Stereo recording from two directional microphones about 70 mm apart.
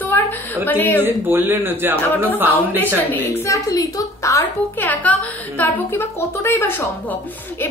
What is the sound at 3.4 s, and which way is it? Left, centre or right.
A woman's voice, left.